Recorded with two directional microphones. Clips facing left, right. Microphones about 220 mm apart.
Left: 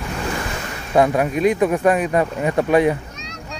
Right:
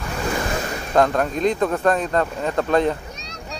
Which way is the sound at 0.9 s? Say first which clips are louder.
Left 2 dB; 10° left (ahead or behind).